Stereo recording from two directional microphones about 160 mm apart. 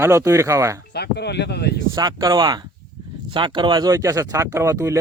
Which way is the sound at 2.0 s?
25° right (ahead or behind).